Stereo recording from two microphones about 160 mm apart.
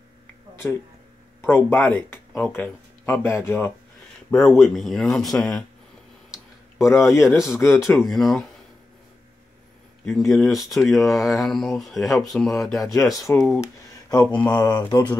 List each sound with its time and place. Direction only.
1.4 s speech: 15° left (ahead or behind)
4.3 s speech: 5° left (ahead or behind)
6.8 s speech: 20° left (ahead or behind)
7.1 s speech: centre (ahead or behind)
10.0 s speech: centre (ahead or behind)
12.9 s speech: 20° left (ahead or behind)
14.4 s speech: 25° left (ahead or behind)